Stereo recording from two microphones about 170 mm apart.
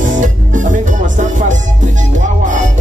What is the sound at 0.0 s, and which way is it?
Music, 50° right (ahead or behind).